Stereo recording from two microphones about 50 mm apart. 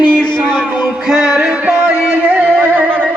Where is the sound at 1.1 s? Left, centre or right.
Centre.